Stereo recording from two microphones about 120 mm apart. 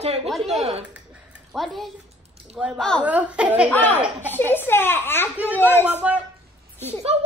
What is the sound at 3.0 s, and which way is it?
Speech, 10° right (ahead or behind).